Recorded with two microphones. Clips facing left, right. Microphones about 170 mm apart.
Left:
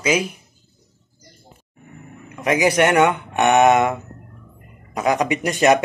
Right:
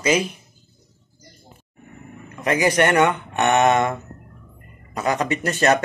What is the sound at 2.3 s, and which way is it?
Speech, 10° left (ahead or behind).